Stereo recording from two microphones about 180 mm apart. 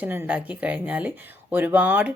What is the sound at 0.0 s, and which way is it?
Speech, 10° right (ahead or behind).